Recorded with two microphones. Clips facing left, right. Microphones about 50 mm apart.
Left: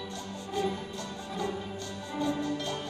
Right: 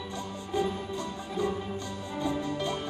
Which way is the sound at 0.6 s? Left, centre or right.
Centre.